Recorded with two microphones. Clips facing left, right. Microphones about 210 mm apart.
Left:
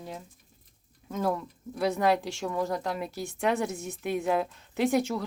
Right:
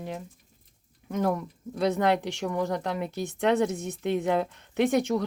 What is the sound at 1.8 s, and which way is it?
A woman's voice, 20° right (ahead or behind).